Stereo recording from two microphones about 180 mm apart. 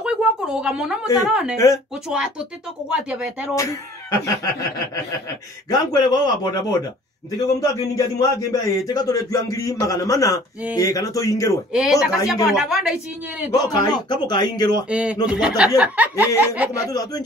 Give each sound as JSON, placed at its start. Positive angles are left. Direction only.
{"t": 0.0, "sound": "a sound", "side_deg": -5}
{"t": 1.3, "sound": "speech", "side_deg": -5}
{"t": 3.5, "sound": "speech", "side_deg": 15}
{"t": 5.7, "sound": "a man's voice", "side_deg": 20}
{"t": 11.7, "sound": "speech", "side_deg": -5}
{"t": 13.5, "sound": "a man's voice", "side_deg": 20}
{"t": 14.9, "sound": "speech", "side_deg": -5}
{"t": 16.9, "sound": "a man's voice", "side_deg": 20}